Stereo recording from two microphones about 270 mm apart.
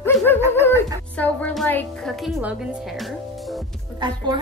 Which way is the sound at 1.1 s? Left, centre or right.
Centre.